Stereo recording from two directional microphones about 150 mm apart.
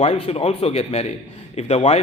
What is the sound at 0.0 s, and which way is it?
A man's voice, 40° left (ahead or behind).